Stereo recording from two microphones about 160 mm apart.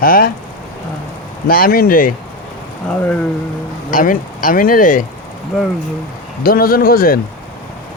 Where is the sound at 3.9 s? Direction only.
55° left (ahead or behind).